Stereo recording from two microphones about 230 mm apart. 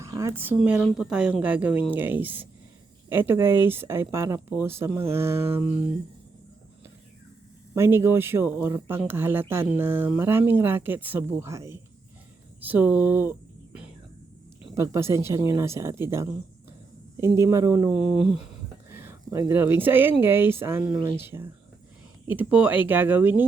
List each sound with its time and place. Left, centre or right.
0.0 s speech: centre
7.8 s speech: centre
14.8 s speech: centre